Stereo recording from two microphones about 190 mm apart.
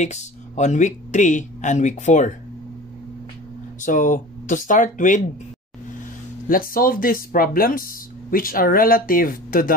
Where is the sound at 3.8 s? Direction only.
40° left (ahead or behind).